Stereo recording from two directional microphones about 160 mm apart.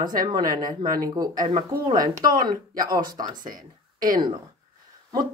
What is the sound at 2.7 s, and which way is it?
Speech, 60° right (ahead or behind).